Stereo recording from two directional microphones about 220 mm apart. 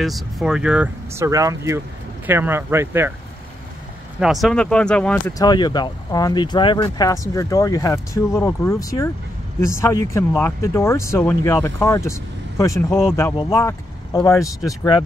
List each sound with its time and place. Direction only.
0.0 s speech: centre (ahead or behind)
4.2 s speech: centre (ahead or behind)
5.4 s speech: 20° left (ahead or behind)